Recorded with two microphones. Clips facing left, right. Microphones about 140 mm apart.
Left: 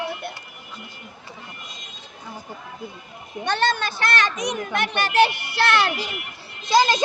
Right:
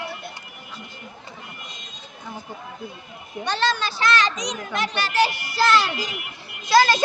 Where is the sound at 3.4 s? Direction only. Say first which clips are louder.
Left 1 dB; 55° left (ahead or behind).